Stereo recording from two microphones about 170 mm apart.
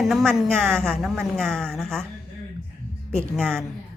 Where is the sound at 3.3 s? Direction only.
5° left (ahead or behind).